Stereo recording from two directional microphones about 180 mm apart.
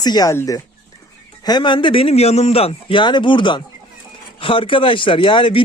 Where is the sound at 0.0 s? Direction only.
20° left (ahead or behind).